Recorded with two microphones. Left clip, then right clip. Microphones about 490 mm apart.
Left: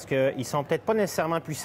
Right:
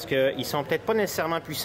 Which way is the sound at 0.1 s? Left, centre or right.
Left.